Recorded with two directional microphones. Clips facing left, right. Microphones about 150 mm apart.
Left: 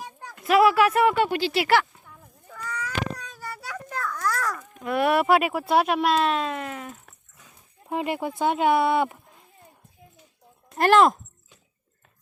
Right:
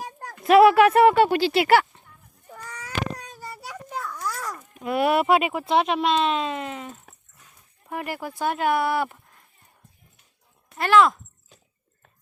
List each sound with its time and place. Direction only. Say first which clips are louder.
0.0 s a sound: right 3 dB; 50° right (ahead or behind)
0.4 s speech: right 4 dB; 25° right (ahead or behind)
2.5 s baby cry: left 4 dB; 30° right (ahead or behind)
4.1 s babbling: left 4 dB; 90° left
4.8 s speech: right 1 dB; 5° right (ahead or behind)
7.9 s speech: left 4 dB; 20° left (ahead or behind)
10.8 s speech: left 1 dB; 40° left (ahead or behind)